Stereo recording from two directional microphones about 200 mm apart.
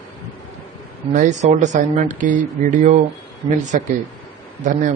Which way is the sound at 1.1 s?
40° right (ahead or behind).